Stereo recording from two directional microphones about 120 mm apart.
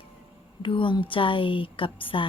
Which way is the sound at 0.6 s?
45° left (ahead or behind).